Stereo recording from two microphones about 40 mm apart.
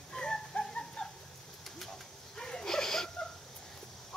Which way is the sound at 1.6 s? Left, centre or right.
Centre.